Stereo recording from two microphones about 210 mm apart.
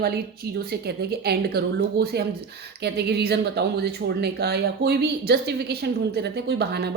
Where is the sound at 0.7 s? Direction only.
50° right (ahead or behind).